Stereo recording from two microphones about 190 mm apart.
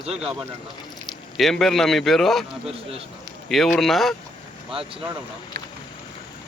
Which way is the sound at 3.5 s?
Centre (ahead or behind).